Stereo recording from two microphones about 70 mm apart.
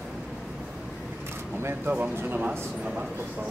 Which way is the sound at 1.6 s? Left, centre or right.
Right.